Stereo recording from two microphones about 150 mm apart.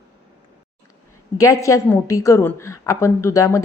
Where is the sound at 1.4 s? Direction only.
20° left (ahead or behind).